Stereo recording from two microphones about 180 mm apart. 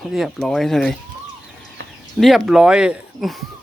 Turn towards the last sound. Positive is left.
turn(degrees=-5)  # may be behind; listen again after turning